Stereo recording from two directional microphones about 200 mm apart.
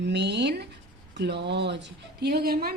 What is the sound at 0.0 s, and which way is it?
A woman's voice, 60° right (ahead or behind).